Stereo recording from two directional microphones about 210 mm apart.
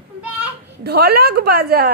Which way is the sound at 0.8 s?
50° right (ahead or behind).